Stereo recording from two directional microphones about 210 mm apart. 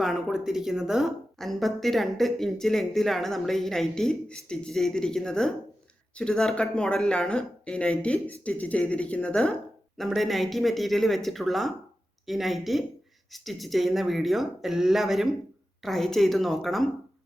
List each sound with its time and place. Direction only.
0.0 s a woman's voice: centre (ahead or behind)